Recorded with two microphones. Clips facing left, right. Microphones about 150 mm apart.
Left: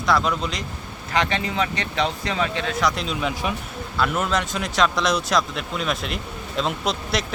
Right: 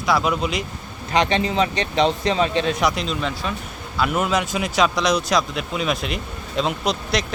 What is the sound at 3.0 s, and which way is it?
Speech, 10° left (ahead or behind).